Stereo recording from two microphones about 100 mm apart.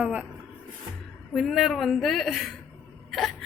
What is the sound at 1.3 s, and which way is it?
A woman's voice, centre (ahead or behind).